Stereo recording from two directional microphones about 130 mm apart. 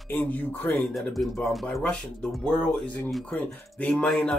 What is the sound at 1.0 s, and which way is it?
Speech, centre (ahead or behind).